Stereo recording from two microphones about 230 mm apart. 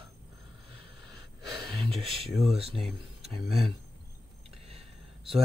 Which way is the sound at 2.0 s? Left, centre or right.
Right.